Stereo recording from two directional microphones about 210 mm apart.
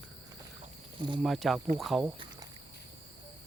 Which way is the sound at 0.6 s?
25° right (ahead or behind).